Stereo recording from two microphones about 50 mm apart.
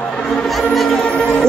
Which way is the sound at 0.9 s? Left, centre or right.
Centre.